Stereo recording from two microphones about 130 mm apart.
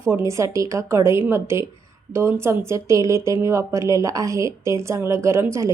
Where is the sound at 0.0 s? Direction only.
20° right (ahead or behind).